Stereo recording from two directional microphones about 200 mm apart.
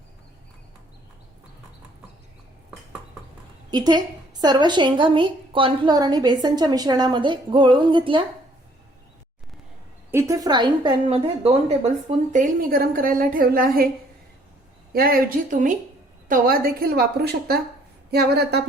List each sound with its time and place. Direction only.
3.7 s a woman's voice: 20° right (ahead or behind)
10.1 s a woman's voice: 15° right (ahead or behind)
12.0 s a woman's voice: 40° right (ahead or behind)
14.9 s a woman's voice: 50° right (ahead or behind)